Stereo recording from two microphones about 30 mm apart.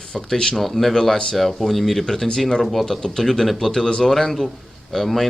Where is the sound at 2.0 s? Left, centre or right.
Centre.